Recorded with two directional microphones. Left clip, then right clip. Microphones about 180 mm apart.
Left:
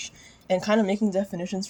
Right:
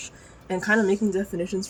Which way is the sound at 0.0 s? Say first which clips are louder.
Left 2 dB; 40° left (ahead or behind).